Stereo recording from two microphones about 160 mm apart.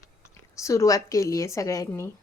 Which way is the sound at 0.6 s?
20° left (ahead or behind).